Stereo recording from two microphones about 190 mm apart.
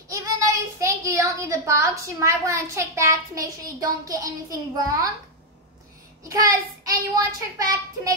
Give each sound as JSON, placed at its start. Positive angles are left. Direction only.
{"t": 0.1, "sound": "a child's voice", "side_deg": -15}
{"t": 6.2, "sound": "a child's voice", "side_deg": -20}